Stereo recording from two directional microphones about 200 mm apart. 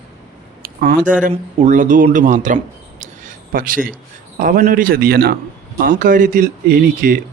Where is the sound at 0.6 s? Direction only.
45° right (ahead or behind).